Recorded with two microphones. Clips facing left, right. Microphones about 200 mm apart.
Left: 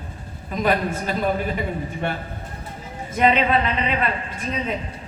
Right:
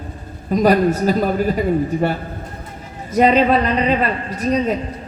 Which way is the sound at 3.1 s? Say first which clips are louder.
Right 5 dB; 40° right (ahead or behind).